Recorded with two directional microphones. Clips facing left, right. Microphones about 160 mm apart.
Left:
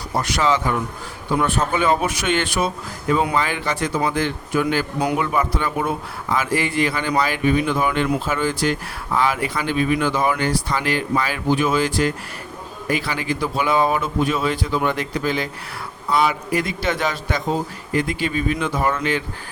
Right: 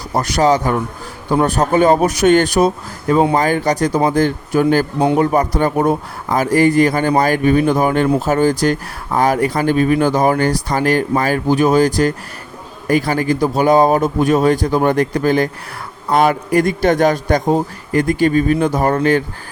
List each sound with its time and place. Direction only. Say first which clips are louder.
0.1 s speech: right 6 dB; 40° right (ahead or behind)
4.9 s a man's voice: right 7 dB; 30° right (ahead or behind)
5.2 s speech: right 7 dB; 40° right (ahead or behind)